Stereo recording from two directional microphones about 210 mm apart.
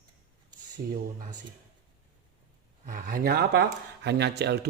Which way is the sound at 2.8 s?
40° right (ahead or behind).